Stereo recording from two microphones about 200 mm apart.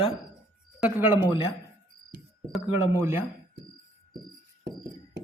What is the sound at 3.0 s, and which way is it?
Speech, 10° right (ahead or behind).